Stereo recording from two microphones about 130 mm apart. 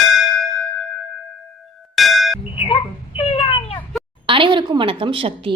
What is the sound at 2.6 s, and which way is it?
Speech, 45° left (ahead or behind).